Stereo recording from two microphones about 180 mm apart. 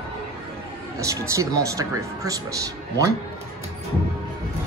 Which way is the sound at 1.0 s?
15° right (ahead or behind).